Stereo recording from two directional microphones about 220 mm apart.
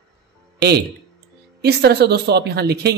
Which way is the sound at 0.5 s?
50° right (ahead or behind).